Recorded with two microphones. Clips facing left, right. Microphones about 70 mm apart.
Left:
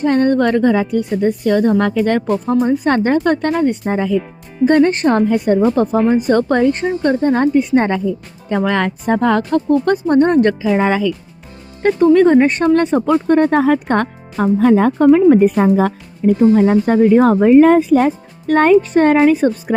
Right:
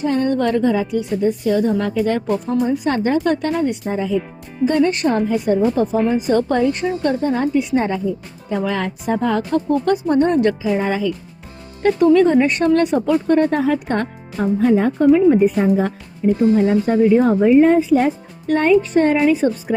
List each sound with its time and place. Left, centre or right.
0.0 s a woman's voice: left
2.5 s a woman's voice: left
3.9 s speech: left
4.6 s a woman's voice: left
7.9 s speech: left
9.8 s a woman's voice: left
10.7 s speech: left
11.8 s speech: left
13.6 s speech: left